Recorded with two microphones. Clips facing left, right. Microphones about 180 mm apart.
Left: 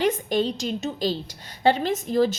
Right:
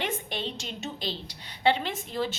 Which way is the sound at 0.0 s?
40° left (ahead or behind).